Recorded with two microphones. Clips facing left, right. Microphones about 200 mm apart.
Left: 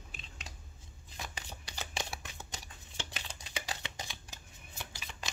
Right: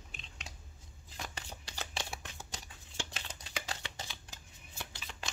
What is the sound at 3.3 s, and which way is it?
Shuffling cards, 15° left (ahead or behind).